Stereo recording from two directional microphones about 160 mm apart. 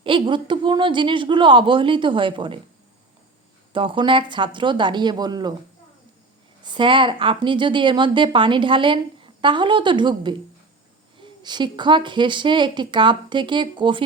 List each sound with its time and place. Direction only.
0.0 s a woman's voice: 30° right (ahead or behind)
3.7 s a woman's voice: 30° right (ahead or behind)
6.6 s a woman's voice: 30° right (ahead or behind)